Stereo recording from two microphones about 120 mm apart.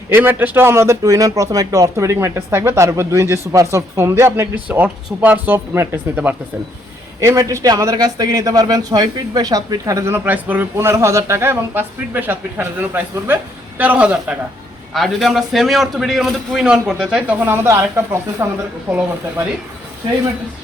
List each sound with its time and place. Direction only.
0.1 s a man's voice: 15° right (ahead or behind)
7.2 s a man's voice: 25° right (ahead or behind)
14.9 s a man's voice: centre (ahead or behind)